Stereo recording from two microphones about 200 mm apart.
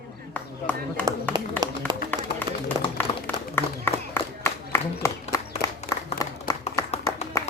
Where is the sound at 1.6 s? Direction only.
10° left (ahead or behind).